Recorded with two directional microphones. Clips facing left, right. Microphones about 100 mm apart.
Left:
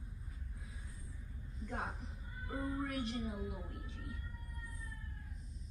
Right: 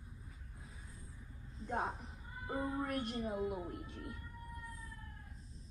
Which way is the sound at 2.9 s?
50° right (ahead or behind).